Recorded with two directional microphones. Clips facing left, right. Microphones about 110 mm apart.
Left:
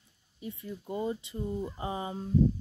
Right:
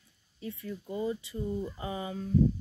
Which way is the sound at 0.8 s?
30° left (ahead or behind).